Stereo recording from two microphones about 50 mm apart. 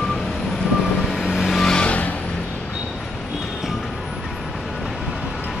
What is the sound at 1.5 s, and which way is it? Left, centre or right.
Vehicle, centre.